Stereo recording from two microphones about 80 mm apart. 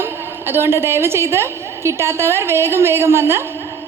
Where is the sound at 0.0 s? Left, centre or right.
Right.